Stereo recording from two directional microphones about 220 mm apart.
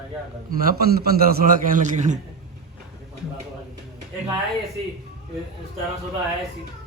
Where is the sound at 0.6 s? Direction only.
40° right (ahead or behind).